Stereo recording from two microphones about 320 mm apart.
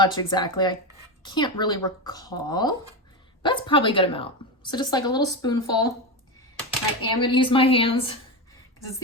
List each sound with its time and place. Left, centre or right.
0.0 s a woman's voice: centre
7.2 s a woman's voice: centre